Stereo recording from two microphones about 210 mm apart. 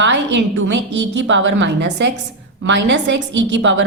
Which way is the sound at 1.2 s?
60° right (ahead or behind).